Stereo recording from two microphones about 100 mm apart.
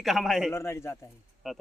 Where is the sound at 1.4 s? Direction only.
Centre (ahead or behind).